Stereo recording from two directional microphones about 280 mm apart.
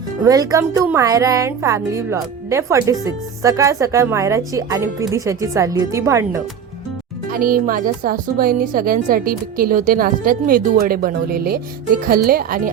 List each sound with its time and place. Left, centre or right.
0.3 s a woman's voice: centre
7.3 s speech: right